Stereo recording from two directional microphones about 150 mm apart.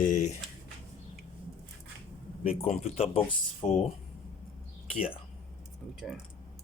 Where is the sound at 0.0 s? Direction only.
55° left (ahead or behind).